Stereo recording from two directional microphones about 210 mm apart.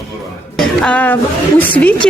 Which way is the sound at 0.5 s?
5° left (ahead or behind).